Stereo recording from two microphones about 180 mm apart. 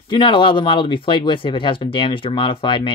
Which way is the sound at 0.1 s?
25° left (ahead or behind).